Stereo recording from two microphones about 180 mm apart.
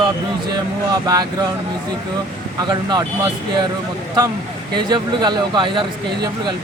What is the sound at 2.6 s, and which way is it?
Speech, 25° right (ahead or behind).